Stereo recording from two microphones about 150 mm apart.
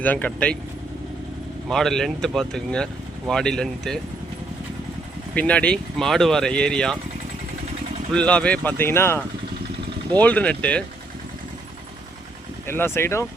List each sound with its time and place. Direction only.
0.0 s speech: 10° left (ahead or behind)
1.7 s speech: 5° left (ahead or behind)
5.3 s speech: 10° left (ahead or behind)
8.1 s speech: 5° left (ahead or behind)
12.6 s speech: 15° left (ahead or behind)